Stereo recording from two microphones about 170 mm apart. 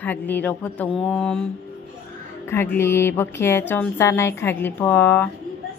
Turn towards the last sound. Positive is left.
turn(degrees=10)  # may be behind; listen again after turning